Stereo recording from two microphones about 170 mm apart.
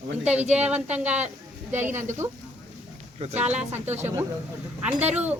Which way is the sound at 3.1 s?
40° right (ahead or behind).